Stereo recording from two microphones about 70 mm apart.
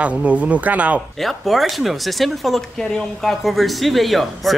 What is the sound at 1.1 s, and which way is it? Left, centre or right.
Speech, centre.